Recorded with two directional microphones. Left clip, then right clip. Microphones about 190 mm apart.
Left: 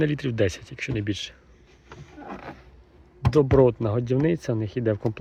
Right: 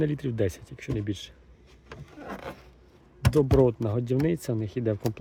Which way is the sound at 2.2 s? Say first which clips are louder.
Even; 50° right (ahead or behind).